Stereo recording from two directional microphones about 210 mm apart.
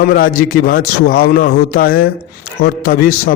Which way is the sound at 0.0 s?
45° left (ahead or behind).